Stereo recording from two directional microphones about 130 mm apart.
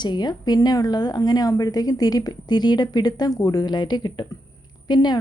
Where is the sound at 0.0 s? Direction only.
35° left (ahead or behind).